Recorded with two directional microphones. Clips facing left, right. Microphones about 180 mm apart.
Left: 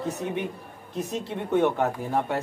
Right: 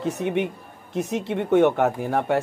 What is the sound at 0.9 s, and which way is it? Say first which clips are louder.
Speech: right 5 dB; 75° right (ahead or behind).